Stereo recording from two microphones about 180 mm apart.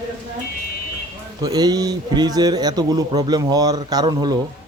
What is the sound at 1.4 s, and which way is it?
A man's voice, 20° right (ahead or behind).